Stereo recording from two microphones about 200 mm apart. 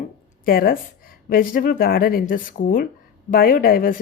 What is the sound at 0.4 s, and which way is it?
Speech, 45° left (ahead or behind).